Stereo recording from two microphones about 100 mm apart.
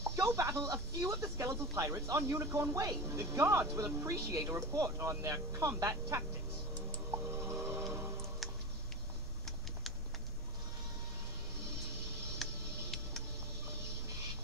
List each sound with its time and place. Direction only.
0.0 s speech: 25° right (ahead or behind)
7.4 s music: 25° right (ahead or behind)
8.4 s tick: centre (ahead or behind)
12.4 s tick-tock: centre (ahead or behind)